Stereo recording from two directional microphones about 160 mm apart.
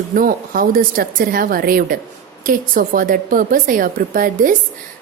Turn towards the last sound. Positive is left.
turn(degrees=-60)  # may be behind; listen again after turning